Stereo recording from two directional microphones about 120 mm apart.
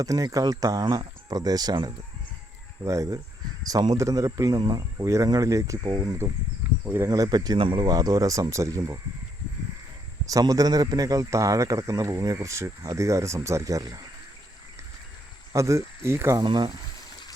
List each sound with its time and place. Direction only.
0.0 s a man's voice: 30° right (ahead or behind)
5.8 s speech: 40° right (ahead or behind)
6.1 s a man's voice: 25° right (ahead or behind)
7.1 s speech: 35° right (ahead or behind)
10.2 s a man's voice: 30° right (ahead or behind)
15.5 s a man's voice: 25° right (ahead or behind)
16.4 s speech: 40° right (ahead or behind)